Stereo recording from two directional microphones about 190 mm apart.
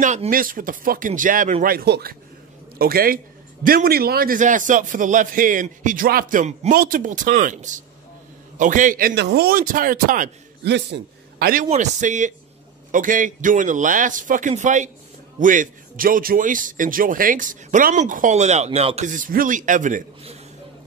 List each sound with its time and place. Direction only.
0.0 s speech: 40° right (ahead or behind)
10.6 s a man's voice: 60° right (ahead or behind)
11.7 s speech: 40° right (ahead or behind)